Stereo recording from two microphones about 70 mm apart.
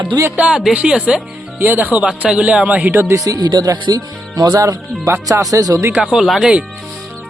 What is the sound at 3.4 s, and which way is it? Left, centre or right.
Speech, right.